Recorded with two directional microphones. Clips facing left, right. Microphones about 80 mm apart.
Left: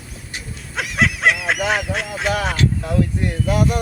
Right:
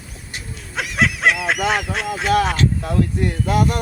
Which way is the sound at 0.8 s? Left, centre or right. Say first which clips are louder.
Even; centre.